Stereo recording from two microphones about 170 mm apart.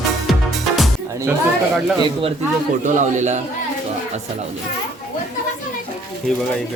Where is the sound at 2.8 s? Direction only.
45° right (ahead or behind).